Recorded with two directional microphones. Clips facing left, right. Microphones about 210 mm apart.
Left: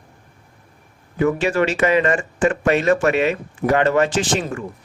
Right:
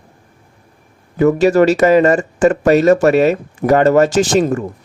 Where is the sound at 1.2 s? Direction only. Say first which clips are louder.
Right 7 dB; 40° right (ahead or behind).